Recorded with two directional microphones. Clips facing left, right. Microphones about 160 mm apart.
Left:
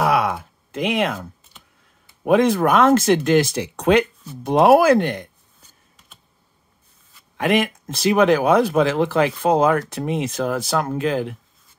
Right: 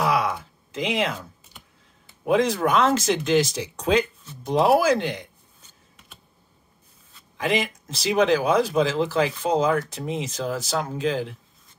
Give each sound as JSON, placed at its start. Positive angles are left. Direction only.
{"t": 0.0, "sound": "a sound", "side_deg": 60}
{"t": 2.2, "sound": "speech", "side_deg": 55}
{"t": 7.3, "sound": "speech", "side_deg": 55}